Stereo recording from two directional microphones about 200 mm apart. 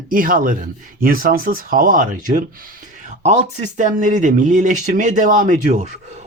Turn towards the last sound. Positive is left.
turn(degrees=-40)  # may be behind; listen again after turning